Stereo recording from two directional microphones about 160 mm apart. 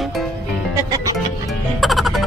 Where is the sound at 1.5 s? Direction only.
Centre (ahead or behind).